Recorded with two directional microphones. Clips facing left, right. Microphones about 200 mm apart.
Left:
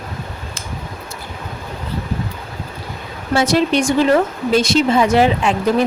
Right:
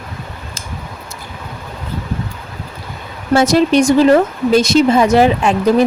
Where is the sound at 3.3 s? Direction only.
45° right (ahead or behind).